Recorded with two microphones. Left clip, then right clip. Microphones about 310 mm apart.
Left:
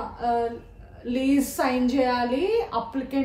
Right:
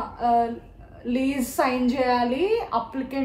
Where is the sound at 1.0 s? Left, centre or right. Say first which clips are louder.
Right 1 dB; right.